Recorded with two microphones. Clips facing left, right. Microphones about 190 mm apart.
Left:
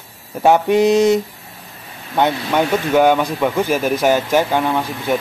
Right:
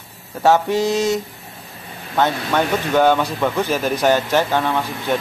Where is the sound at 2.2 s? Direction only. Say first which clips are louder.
Left 2 dB; 10° left (ahead or behind).